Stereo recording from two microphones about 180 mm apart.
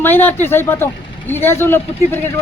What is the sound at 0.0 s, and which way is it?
Speech, 10° left (ahead or behind).